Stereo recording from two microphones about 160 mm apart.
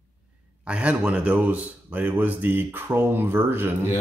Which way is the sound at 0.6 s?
5° right (ahead or behind).